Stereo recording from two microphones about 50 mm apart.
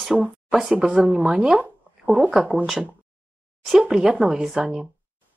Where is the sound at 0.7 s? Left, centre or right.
Right.